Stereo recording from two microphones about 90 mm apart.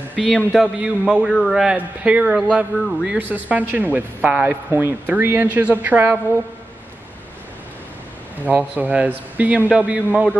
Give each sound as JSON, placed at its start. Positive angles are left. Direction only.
{"t": 0.1, "sound": "a man's voice", "side_deg": 5}
{"t": 0.7, "sound": "a man's voice", "side_deg": -10}
{"t": 1.3, "sound": "a man's voice", "side_deg": 5}
{"t": 1.8, "sound": "a man's voice", "side_deg": -15}
{"t": 2.8, "sound": "a man's voice", "side_deg": 0}
{"t": 3.1, "sound": "a man's voice", "side_deg": -20}
{"t": 8.5, "sound": "a man's voice", "side_deg": -15}